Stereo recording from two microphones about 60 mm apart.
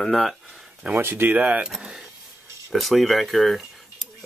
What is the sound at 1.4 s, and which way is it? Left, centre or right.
Speech, right.